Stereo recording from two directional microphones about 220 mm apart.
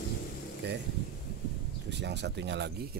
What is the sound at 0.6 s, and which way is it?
Speech, 50° right (ahead or behind).